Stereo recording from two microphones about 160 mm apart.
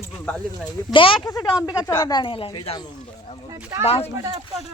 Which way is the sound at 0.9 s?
35° left (ahead or behind).